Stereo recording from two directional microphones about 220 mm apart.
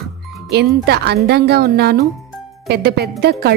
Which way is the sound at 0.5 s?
50° right (ahead or behind).